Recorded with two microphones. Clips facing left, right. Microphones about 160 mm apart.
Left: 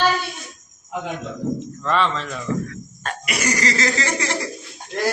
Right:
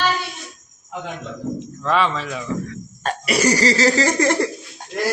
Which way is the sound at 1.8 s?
5° right (ahead or behind).